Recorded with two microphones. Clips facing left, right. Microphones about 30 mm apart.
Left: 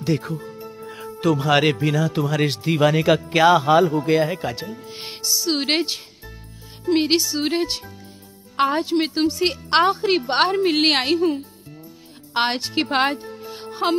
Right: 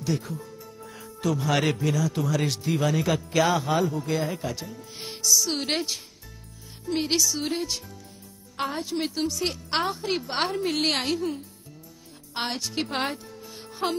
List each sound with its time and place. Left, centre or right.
0.0 s speech: left